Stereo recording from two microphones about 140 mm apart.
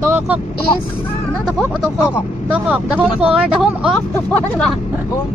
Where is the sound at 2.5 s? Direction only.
10° right (ahead or behind).